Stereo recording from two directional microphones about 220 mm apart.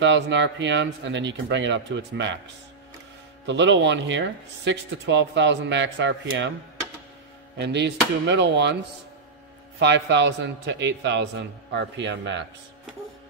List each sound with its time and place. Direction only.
0.0 s speech: 55° right (ahead or behind)
3.4 s speech: 55° right (ahead or behind)
7.5 s a man's voice: 50° right (ahead or behind)
9.8 s a man's voice: 50° right (ahead or behind)